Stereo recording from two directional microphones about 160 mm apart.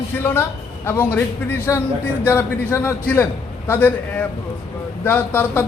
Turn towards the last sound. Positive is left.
turn(degrees=15)  # may be behind; listen again after turning